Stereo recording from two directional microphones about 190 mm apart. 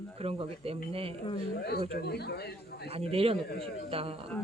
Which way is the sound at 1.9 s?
60° left (ahead or behind).